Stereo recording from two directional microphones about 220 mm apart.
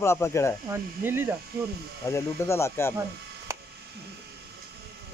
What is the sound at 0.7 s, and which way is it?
Speech, 10° right (ahead or behind).